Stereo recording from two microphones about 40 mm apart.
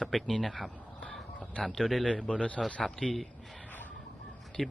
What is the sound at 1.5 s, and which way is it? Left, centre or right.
Speech, left.